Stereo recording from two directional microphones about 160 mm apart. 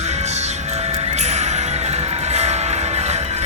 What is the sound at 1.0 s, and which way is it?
Music, 45° right (ahead or behind).